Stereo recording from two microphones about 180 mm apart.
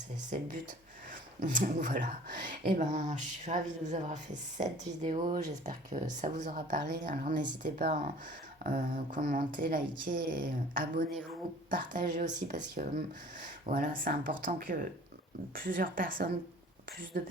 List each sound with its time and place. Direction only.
1.4 s speech: 45° right (ahead or behind)